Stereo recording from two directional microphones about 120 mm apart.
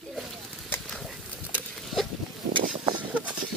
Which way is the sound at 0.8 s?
Centre (ahead or behind).